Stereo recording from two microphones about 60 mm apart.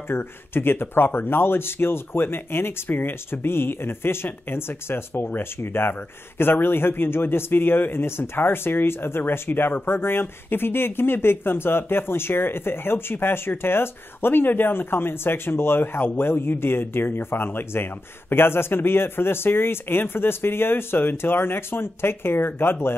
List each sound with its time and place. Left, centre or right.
0.1 s speech: left